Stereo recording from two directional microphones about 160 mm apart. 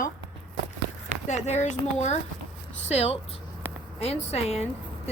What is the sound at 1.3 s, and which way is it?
A woman's voice, 45° left (ahead or behind).